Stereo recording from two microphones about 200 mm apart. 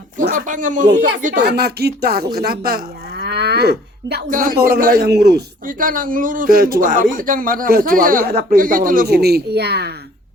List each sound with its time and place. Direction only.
0.2 s speech: 40° right (ahead or behind)
1.5 s speech: 55° right (ahead or behind)